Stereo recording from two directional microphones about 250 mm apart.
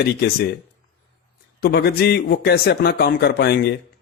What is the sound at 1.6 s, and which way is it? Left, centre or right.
A man's voice, left.